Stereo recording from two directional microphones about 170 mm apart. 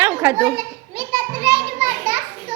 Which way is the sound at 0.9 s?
20° right (ahead or behind).